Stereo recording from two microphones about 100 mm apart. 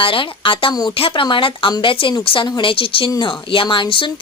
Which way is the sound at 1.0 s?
60° left (ahead or behind).